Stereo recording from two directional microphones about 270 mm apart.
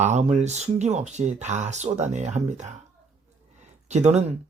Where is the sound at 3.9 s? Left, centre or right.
Right.